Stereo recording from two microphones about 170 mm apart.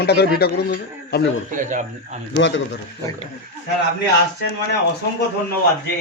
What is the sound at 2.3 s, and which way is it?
Speech, 90° left.